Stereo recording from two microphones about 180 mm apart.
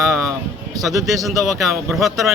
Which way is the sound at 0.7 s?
20° right (ahead or behind).